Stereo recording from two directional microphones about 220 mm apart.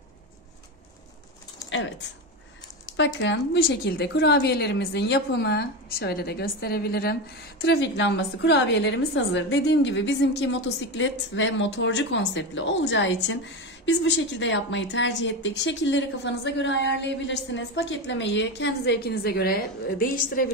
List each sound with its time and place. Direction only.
3.0 s a woman's voice: 55° left (ahead or behind)